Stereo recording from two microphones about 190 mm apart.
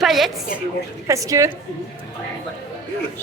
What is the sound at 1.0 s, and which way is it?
Speech, 15° right (ahead or behind).